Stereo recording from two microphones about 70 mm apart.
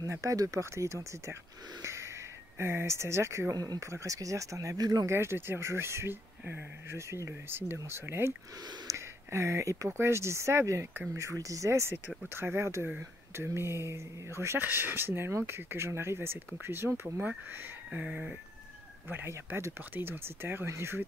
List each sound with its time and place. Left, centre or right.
0.0 s speech: right
1.8 s snort: right
2.6 s speech: right
3.5 s speech: right
3.8 s speech: right
5.0 s speech: right
12.4 s speech: right
14.6 s speech: right
17.0 s speech: centre
17.9 s a sound: centre
19.0 s speech: right